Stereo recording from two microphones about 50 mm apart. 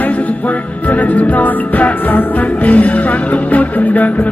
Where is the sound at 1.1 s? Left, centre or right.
Left.